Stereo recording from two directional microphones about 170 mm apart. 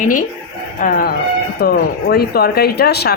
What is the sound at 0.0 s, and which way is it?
Speech, 50° left (ahead or behind).